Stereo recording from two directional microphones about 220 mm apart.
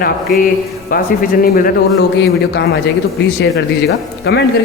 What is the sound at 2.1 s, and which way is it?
Speech, 50° left (ahead or behind).